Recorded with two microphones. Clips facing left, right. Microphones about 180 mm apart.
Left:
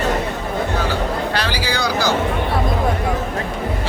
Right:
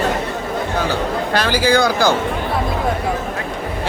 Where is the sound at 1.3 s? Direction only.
50° right (ahead or behind).